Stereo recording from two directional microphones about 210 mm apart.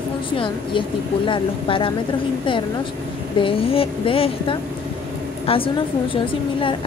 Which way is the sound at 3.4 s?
25° left (ahead or behind).